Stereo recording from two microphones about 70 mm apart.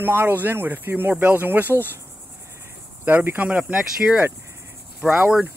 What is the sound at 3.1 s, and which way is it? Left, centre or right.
Speech, right.